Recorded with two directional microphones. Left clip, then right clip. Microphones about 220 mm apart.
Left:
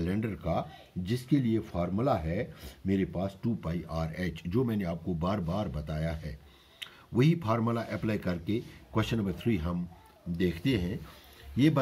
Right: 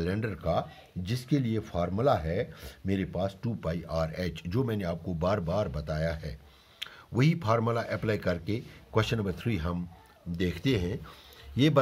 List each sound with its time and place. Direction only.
0.0 s speech: 50° right (ahead or behind)